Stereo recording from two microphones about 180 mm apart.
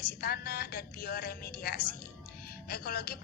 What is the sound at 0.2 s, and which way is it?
Speech, 60° left (ahead or behind).